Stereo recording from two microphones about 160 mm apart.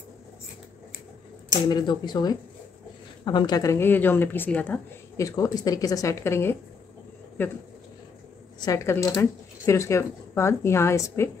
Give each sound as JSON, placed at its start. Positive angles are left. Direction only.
{"t": 1.7, "sound": "a woman's voice", "side_deg": 25}
{"t": 8.5, "sound": "a woman's voice", "side_deg": 20}